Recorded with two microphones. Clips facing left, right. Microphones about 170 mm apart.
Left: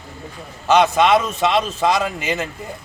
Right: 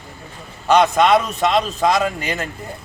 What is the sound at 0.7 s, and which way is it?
A man's voice, 5° left (ahead or behind).